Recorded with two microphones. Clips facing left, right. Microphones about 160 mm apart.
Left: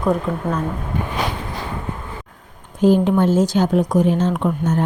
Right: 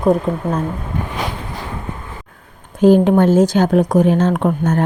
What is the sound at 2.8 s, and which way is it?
Speech, 60° right (ahead or behind).